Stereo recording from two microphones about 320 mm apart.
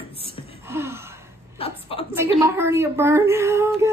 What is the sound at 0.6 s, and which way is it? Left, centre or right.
Gasp, centre.